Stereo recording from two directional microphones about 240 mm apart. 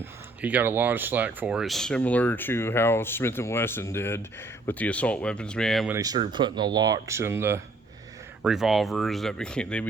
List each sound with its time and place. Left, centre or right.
0.0 s speech: centre
6.0 s speech: centre